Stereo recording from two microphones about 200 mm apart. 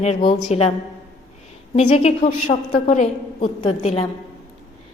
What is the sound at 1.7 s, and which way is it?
A woman's voice, 30° left (ahead or behind).